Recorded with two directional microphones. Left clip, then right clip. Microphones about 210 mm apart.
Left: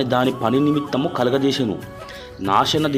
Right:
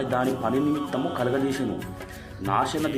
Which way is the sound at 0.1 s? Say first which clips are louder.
Left 5 dB; 40° left (ahead or behind).